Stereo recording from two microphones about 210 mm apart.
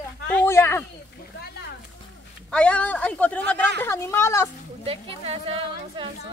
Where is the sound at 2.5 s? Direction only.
5° left (ahead or behind).